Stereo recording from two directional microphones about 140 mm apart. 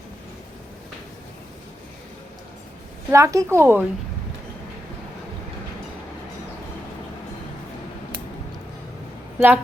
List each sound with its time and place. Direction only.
3.1 s a woman's voice: 20° right (ahead or behind)
9.4 s speech: 15° right (ahead or behind)